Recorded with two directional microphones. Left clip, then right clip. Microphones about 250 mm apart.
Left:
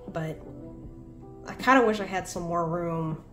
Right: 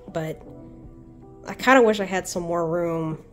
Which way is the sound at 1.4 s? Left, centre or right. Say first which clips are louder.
Right 5 dB; right.